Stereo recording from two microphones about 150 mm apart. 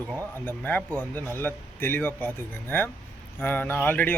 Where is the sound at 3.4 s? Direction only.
10° left (ahead or behind).